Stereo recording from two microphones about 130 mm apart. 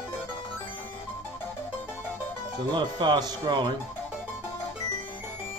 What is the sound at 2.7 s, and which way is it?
Speech, 35° right (ahead or behind).